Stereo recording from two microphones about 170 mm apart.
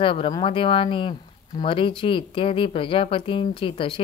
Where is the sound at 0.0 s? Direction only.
30° left (ahead or behind).